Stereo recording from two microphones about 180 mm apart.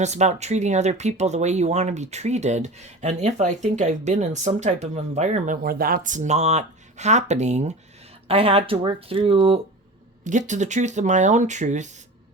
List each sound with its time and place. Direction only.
0.0 s speech: 40° right (ahead or behind)
5.6 s speech: 55° right (ahead or behind); by 9.6 s 30° right (ahead or behind)
10.2 s speech: 45° right (ahead or behind)